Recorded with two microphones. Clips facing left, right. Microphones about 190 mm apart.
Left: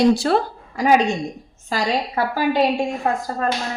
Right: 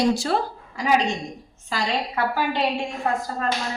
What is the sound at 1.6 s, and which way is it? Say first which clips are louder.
Speech: left 4 dB; 40° left (ahead or behind).